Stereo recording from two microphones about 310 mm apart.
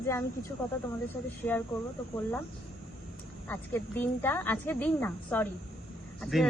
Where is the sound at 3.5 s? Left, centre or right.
Centre.